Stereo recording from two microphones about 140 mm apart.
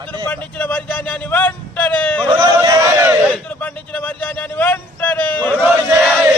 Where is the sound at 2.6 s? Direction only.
25° right (ahead or behind).